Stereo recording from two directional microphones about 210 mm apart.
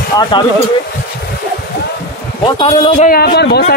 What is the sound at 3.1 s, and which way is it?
Speech, 50° left (ahead or behind).